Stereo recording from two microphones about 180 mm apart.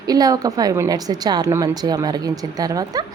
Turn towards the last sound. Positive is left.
turn(degrees=-20)  # may be behind; listen again after turning